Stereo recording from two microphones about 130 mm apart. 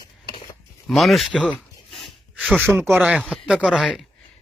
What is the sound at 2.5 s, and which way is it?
Speech, 20° right (ahead or behind).